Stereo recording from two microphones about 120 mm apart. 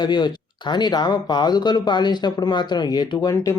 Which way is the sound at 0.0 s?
40° left (ahead or behind).